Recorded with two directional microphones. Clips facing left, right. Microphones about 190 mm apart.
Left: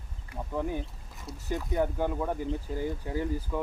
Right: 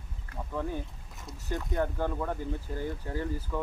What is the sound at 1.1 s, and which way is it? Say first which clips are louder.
Boat: left 3 dB; centre (ahead or behind).